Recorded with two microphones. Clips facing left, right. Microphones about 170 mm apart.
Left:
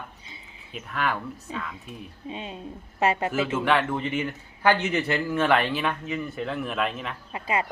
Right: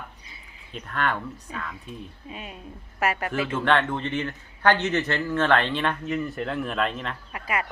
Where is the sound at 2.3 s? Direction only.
25° left (ahead or behind).